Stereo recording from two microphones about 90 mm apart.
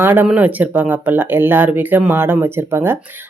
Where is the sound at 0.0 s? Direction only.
25° right (ahead or behind).